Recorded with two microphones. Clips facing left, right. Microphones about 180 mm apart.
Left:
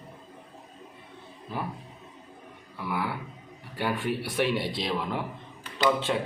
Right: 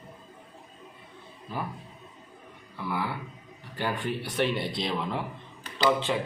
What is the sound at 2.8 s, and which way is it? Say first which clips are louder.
Speech: even; centre (ahead or behind).